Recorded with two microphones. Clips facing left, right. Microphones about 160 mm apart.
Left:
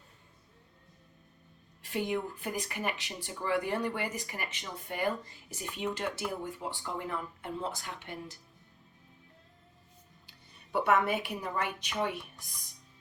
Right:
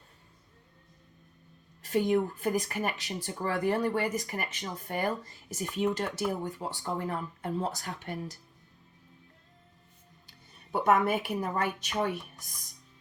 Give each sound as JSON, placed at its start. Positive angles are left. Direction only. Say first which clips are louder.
{"t": 1.8, "sound": "speech", "louder": "right 6 dB", "side_deg": -40}
{"t": 10.2, "sound": "speech", "louder": "right 2 dB", "side_deg": -45}